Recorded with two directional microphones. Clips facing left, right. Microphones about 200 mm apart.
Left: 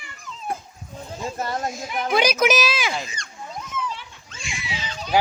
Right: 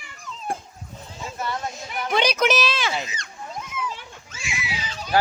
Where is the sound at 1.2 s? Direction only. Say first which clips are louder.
Left 2 dB; 45° left (ahead or behind).